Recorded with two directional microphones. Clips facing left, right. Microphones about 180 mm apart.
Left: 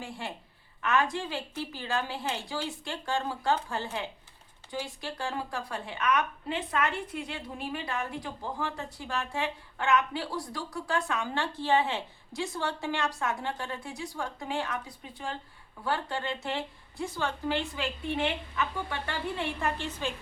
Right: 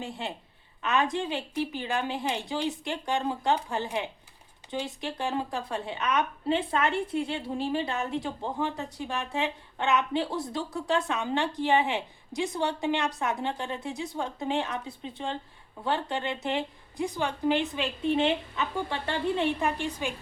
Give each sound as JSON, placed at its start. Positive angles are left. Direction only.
{"t": 0.0, "sound": "a woman's voice", "side_deg": -20}